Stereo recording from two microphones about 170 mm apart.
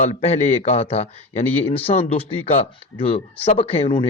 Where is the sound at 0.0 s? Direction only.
40° left (ahead or behind).